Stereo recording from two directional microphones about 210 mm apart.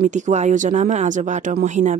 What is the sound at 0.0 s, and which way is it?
Speech, 35° right (ahead or behind).